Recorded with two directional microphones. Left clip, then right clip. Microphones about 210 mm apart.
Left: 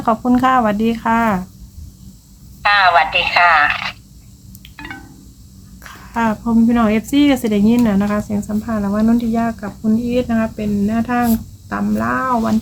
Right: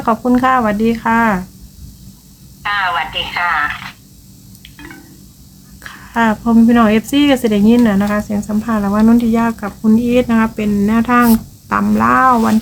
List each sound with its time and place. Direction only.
0.0 s speech: 5° left (ahead or behind)
2.6 s speech: 50° left (ahead or behind)
5.8 s speech: centre (ahead or behind); by 12.5 s 20° right (ahead or behind)